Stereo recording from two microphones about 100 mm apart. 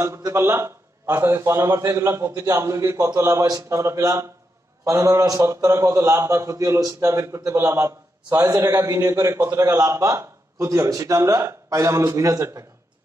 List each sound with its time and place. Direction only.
0.0 s a man's voice: 30° right (ahead or behind)